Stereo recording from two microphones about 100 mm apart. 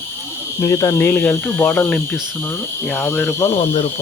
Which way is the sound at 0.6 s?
35° left (ahead or behind).